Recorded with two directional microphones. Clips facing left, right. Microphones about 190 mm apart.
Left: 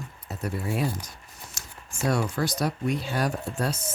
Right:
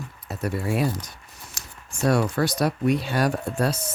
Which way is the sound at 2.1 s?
65° right (ahead or behind).